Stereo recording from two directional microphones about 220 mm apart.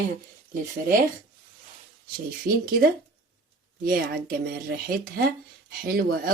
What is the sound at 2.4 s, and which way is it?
Speech, 40° right (ahead or behind).